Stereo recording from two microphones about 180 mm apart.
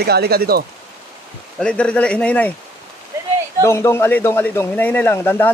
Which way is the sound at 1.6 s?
5° left (ahead or behind).